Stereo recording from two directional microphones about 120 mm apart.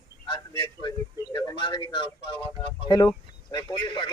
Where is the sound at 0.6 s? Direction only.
40° left (ahead or behind).